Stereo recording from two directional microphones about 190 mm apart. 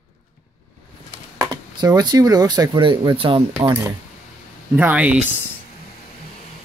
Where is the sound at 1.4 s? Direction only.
20° right (ahead or behind).